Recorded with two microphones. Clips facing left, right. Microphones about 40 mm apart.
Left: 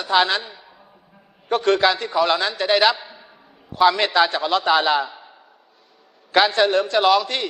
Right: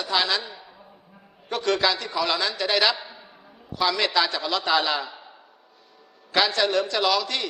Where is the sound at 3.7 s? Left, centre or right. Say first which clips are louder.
Left 6 dB; left.